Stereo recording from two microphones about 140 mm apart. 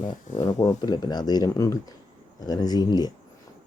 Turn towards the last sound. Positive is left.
turn(degrees=30)  # may be behind; listen again after turning